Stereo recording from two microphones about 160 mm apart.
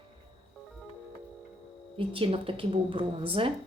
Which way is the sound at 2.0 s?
35° right (ahead or behind).